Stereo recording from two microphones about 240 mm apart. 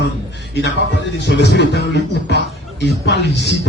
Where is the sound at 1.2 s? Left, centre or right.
Left.